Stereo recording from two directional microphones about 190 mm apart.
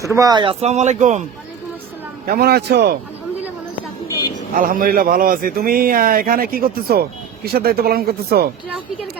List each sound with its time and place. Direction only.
0.1 s speech: 20° right (ahead or behind); by 1.2 s 40° right (ahead or behind)
2.2 s a man's voice: 55° right (ahead or behind)
4.5 s a man's voice: 45° right (ahead or behind)